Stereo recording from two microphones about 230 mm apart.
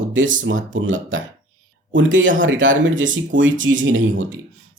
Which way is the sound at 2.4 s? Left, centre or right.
Right.